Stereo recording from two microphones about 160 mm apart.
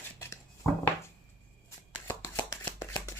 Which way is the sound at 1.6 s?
20° left (ahead or behind).